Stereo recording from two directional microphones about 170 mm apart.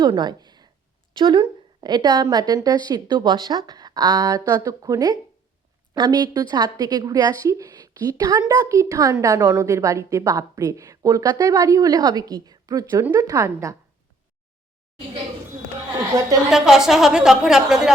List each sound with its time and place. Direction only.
0.0 s a sound: 25° right (ahead or behind)
1.1 s a woman's voice: 25° right (ahead or behind)
16.5 s a woman's voice: centre (ahead or behind)